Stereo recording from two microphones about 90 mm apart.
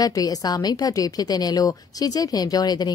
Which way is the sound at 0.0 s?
45° left (ahead or behind).